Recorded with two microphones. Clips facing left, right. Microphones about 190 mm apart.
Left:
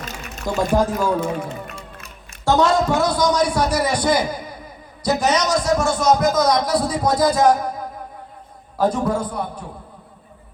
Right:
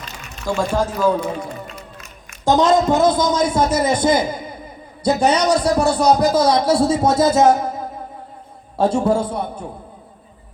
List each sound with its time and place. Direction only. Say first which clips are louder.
0.4 s speech: left 1 dB; 15° left (ahead or behind)
2.4 s a man's voice: right 2 dB; 20° right (ahead or behind)